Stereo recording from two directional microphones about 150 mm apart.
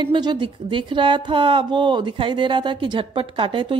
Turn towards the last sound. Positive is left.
turn(degrees=-35)  # may be behind; listen again after turning